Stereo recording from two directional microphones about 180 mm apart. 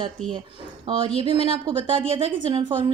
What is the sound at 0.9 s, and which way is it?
Speech, 30° right (ahead or behind).